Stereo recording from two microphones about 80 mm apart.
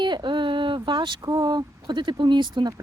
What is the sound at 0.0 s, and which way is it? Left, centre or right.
Speech, right.